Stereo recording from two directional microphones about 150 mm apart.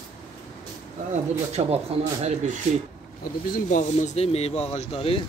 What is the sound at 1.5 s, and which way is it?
Speech, 45° right (ahead or behind).